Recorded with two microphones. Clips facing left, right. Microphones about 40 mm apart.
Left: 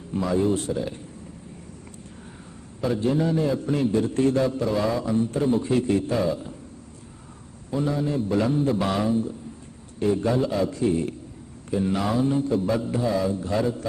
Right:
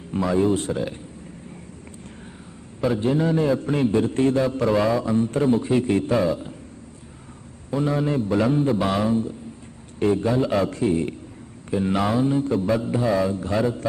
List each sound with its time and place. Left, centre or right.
0.1 s a man's voice: centre
2.8 s a man's voice: centre
4.3 s a man's voice: centre
4.6 s speech: right
4.9 s a man's voice: centre
5.8 s speech: right
6.2 s a man's voice: centre
7.7 s a man's voice: centre
7.9 s a man's voice: right
8.3 s a man's voice: centre
10.5 s a man's voice: right
10.8 s speech: right
12.2 s a man's voice: centre